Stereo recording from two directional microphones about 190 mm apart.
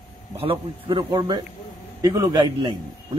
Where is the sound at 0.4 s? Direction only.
25° right (ahead or behind).